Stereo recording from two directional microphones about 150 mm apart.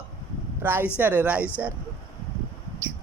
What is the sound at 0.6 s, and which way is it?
Speech, 15° right (ahead or behind).